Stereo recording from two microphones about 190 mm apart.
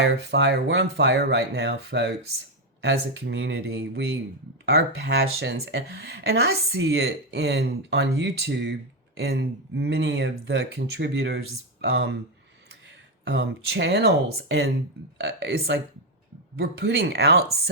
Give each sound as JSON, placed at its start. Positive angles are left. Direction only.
{"t": 0.0, "sound": "speech", "side_deg": -65}
{"t": 13.2, "sound": "speech", "side_deg": -60}